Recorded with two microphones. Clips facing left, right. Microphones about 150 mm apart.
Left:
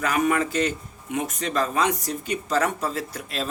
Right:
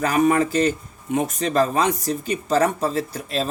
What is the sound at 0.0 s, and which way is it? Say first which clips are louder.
Speech: right 4 dB; 35° right (ahead or behind).